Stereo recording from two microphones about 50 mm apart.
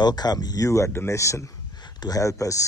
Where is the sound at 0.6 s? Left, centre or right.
Left.